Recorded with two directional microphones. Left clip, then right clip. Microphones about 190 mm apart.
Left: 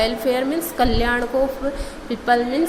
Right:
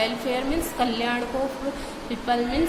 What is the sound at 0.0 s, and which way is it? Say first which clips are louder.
A woman's voice: left 6 dB; 30° left (ahead or behind).